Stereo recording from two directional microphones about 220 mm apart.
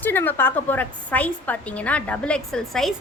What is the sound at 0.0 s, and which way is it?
A woman's voice, 10° left (ahead or behind).